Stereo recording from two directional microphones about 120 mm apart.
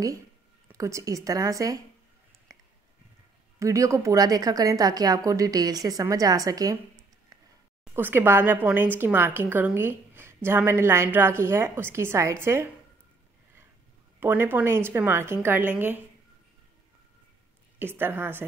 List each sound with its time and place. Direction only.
0.7 s a woman's voice: 25° right (ahead or behind)
2.5 s a sound: 30° right (ahead or behind)
3.5 s a woman's voice: 25° right (ahead or behind)
7.9 s a woman's voice: 20° right (ahead or behind)
14.2 s a woman's voice: 20° right (ahead or behind)
17.7 s a woman's voice: 20° right (ahead or behind)